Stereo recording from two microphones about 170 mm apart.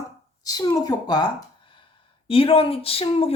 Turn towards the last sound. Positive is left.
turn(degrees=35)  # may be behind; listen again after turning